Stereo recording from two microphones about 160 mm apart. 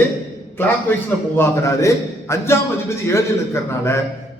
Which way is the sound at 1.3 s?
15° left (ahead or behind).